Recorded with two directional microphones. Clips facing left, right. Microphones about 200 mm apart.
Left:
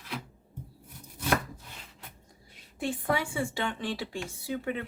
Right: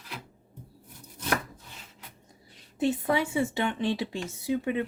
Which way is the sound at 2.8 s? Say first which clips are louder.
Right 4 dB; 20° right (ahead or behind).